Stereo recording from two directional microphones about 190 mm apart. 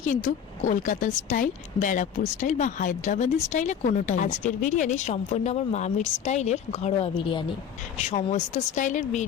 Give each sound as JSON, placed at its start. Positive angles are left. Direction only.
{"t": 0.0, "sound": "speech", "side_deg": 45}
{"t": 8.1, "sound": "speech", "side_deg": 40}